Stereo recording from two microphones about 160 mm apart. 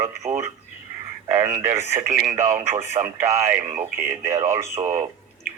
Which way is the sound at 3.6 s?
45° right (ahead or behind).